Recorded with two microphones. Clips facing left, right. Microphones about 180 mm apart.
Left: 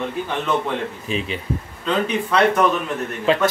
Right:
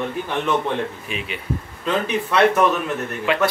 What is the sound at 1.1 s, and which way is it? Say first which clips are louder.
Speech: left 5 dB; 30° left (ahead or behind).